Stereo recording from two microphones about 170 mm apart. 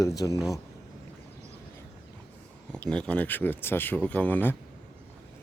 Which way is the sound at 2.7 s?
5° left (ahead or behind).